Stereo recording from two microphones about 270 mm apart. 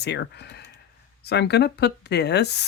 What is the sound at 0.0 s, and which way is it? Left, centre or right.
Speech, left.